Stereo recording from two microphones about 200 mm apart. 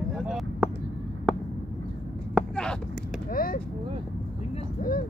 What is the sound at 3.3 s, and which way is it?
Vehicle, 45° left (ahead or behind).